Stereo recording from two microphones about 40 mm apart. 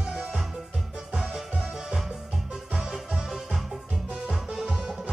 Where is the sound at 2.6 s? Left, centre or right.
Centre.